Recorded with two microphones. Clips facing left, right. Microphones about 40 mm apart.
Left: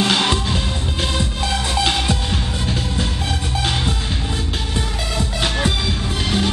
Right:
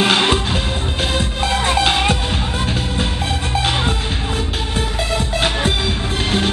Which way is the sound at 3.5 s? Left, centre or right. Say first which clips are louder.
Right 4 dB; right.